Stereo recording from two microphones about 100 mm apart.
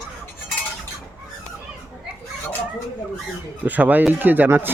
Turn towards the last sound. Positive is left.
turn(degrees=-20)  # may be behind; listen again after turning